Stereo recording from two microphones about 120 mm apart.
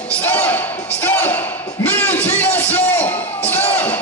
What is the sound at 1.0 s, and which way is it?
Music, 15° left (ahead or behind).